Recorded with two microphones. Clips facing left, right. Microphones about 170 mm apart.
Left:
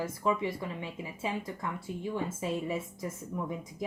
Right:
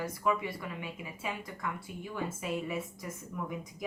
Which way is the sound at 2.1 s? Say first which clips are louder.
Left 1 dB; 30° left (ahead or behind).